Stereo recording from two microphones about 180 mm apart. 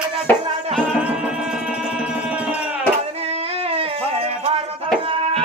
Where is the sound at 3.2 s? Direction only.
35° right (ahead or behind).